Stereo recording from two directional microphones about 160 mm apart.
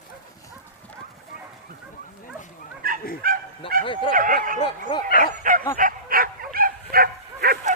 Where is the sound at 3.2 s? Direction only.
65° right (ahead or behind).